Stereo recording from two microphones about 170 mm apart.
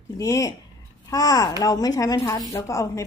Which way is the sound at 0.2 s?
20° left (ahead or behind).